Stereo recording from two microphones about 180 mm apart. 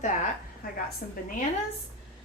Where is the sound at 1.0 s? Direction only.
60° left (ahead or behind).